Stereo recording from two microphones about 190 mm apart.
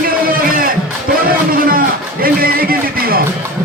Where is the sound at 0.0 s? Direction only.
50° right (ahead or behind).